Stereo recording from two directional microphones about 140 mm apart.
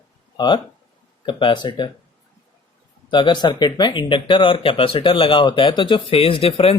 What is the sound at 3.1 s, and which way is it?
Speech, 35° left (ahead or behind).